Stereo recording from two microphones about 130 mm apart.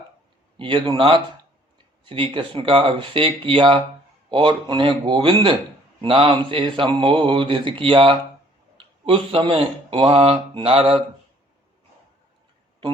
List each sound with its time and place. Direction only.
0.5 s speech: 40° right (ahead or behind)